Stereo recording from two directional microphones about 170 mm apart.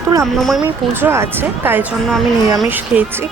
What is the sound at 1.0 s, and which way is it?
A woman's voice, 15° right (ahead or behind).